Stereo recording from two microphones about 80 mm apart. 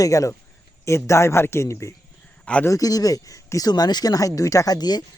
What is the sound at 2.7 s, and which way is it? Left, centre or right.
Speech, left.